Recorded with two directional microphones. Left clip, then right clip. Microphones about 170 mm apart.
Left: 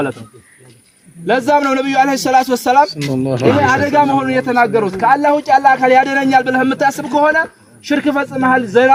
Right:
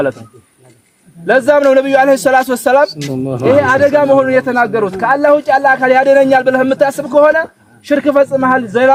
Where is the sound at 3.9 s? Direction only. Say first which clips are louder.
Right 4 dB; 45° right (ahead or behind).